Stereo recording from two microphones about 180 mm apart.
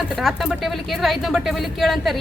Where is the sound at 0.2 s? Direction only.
Centre (ahead or behind).